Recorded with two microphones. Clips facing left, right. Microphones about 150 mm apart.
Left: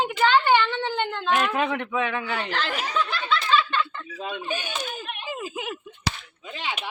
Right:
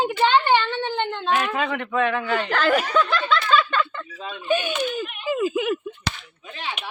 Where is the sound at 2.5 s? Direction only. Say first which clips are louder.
Right 13 dB; 50° right (ahead or behind).